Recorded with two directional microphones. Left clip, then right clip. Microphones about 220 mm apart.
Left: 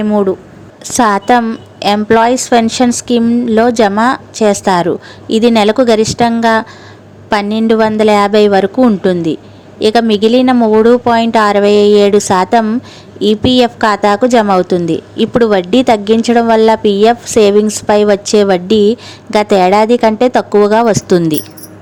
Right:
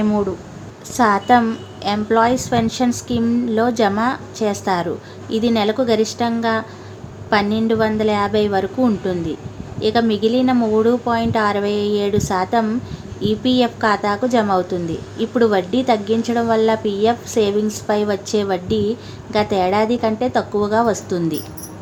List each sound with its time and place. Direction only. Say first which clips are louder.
0.0 s speech: left 8 dB; 20° left (ahead or behind)
0.9 s a woman's voice: left 5 dB; 40° left (ahead or behind)